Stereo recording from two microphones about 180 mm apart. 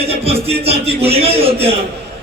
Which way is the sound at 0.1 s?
35° right (ahead or behind).